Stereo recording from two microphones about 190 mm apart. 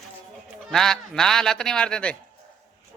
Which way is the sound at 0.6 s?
Centre (ahead or behind).